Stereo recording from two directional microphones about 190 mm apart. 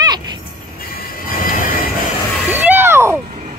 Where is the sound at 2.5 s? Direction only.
10° right (ahead or behind).